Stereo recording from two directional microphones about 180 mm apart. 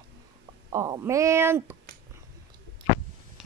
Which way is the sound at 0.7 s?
20° right (ahead or behind).